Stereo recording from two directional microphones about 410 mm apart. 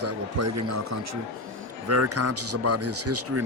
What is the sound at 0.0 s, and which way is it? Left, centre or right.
A man's voice, right.